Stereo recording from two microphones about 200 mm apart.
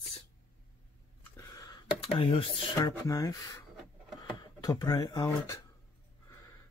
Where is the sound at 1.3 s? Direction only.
15° left (ahead or behind).